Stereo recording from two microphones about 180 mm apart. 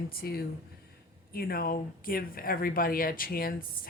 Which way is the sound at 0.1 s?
55° left (ahead or behind).